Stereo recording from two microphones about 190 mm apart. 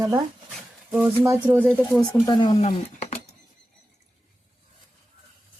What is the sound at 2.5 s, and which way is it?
Speech, 35° left (ahead or behind).